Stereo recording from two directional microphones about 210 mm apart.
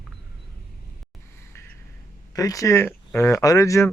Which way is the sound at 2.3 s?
15° left (ahead or behind).